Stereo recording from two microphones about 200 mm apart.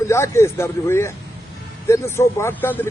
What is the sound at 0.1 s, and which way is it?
Speech, 15° left (ahead or behind).